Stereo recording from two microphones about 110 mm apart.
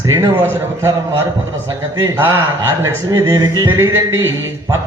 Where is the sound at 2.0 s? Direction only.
35° right (ahead or behind).